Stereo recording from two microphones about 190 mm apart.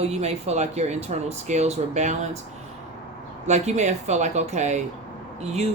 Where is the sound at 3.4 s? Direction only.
35° right (ahead or behind).